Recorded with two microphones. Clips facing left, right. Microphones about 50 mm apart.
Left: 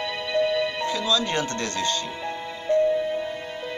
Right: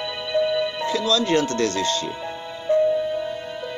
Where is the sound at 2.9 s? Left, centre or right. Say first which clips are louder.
Right 2 dB; left.